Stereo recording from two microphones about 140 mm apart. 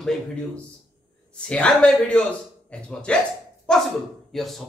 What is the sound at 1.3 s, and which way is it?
Speech, 10° left (ahead or behind).